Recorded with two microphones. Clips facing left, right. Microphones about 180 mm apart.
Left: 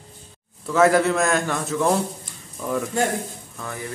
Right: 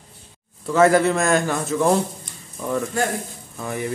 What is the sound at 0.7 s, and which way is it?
A man's voice, centre (ahead or behind).